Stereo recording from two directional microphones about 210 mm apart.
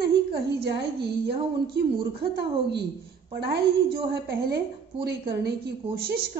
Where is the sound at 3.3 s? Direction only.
50° right (ahead or behind).